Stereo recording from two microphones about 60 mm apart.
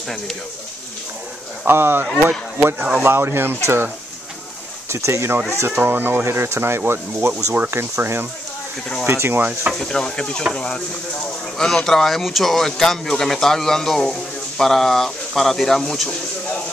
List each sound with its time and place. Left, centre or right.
1.7 s speech: right
4.8 s speech: right
5.7 s speech: right
9.8 s speech: centre